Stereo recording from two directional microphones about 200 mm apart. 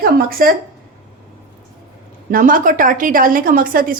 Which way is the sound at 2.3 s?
45° right (ahead or behind).